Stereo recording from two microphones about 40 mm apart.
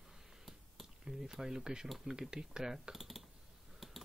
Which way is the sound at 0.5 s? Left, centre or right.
Centre.